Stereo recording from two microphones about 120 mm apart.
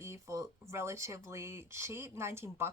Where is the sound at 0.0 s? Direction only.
25° right (ahead or behind).